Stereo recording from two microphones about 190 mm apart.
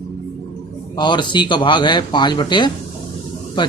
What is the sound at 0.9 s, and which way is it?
A man's voice, 25° left (ahead or behind).